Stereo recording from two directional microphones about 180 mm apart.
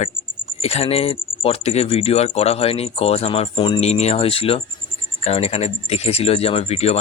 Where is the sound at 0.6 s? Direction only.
35° left (ahead or behind).